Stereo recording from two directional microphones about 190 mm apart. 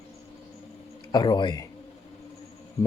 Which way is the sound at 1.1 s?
25° left (ahead or behind).